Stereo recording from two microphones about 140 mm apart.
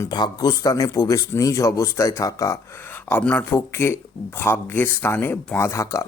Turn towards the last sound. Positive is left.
turn(degrees=20)  # may be behind; listen again after turning